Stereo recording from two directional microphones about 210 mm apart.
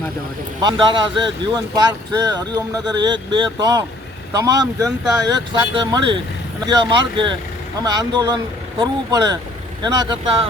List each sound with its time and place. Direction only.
0.6 s speech: 20° right (ahead or behind)